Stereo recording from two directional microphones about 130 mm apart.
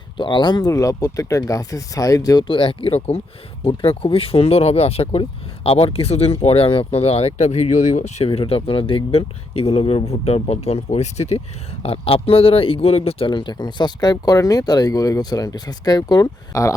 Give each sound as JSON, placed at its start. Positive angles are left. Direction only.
{"t": 0.2, "sound": "speech", "side_deg": 35}